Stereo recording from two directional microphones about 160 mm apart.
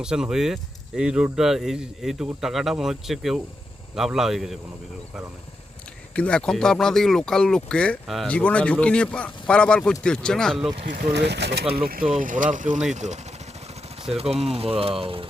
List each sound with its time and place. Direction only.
0.0 s speech: 5° right (ahead or behind)
6.1 s speech: 5° left (ahead or behind)
10.8 s speech: 65° right (ahead or behind); by 11.6 s 90° right
12.2 s speech: 55° right (ahead or behind)
14.2 s speech: 40° right (ahead or behind)